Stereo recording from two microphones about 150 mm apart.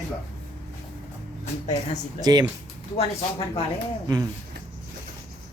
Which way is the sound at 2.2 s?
25° right (ahead or behind).